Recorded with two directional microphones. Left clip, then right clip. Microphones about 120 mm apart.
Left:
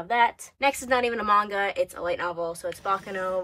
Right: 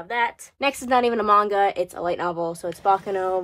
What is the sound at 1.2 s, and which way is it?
Speech, 30° right (ahead or behind).